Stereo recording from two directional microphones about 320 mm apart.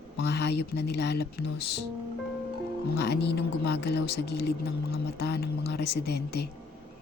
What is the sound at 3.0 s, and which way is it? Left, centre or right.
A man's voice, left.